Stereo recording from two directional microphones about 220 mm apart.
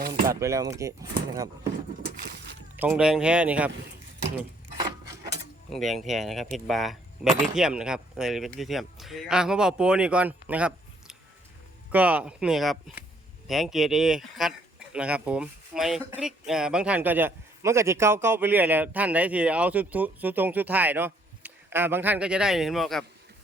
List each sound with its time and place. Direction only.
0.3 s a man's voice: 15° right (ahead or behind)
2.7 s speech: 10° right (ahead or behind)
4.8 s wood: 15° right (ahead or behind)
5.7 s a man's voice: centre (ahead or behind)